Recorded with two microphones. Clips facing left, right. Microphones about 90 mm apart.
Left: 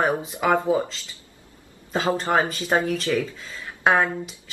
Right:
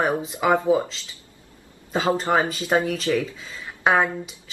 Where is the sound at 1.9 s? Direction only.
5° right (ahead or behind).